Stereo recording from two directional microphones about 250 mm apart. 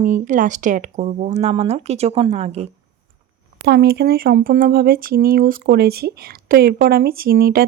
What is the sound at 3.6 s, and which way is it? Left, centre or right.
Speech, right.